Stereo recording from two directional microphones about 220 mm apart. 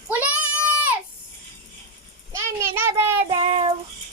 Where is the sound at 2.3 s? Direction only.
10° right (ahead or behind).